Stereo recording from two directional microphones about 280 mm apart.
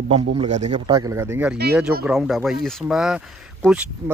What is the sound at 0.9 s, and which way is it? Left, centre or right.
Speech, centre.